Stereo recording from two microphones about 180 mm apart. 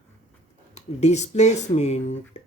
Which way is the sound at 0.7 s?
35° left (ahead or behind).